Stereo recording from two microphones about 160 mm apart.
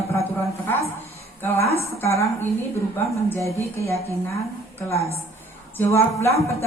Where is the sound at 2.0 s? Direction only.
20° left (ahead or behind).